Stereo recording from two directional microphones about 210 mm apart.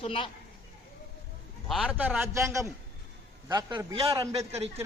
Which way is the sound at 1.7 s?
5° right (ahead or behind).